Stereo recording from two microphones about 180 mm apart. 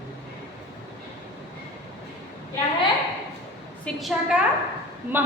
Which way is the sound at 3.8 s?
Centre (ahead or behind).